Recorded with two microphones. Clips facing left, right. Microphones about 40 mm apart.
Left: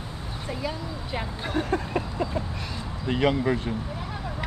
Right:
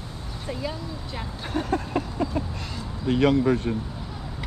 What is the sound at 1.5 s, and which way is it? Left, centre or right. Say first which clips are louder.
Speech: even; left.